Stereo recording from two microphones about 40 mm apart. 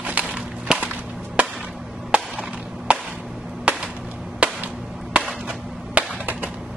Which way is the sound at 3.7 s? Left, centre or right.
Right.